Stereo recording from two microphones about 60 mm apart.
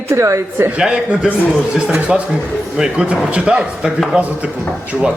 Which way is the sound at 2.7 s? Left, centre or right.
Centre.